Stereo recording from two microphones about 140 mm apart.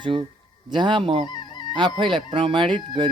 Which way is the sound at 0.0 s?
35° right (ahead or behind).